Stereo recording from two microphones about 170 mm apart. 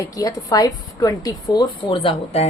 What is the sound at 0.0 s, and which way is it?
A woman's voice, 20° left (ahead or behind).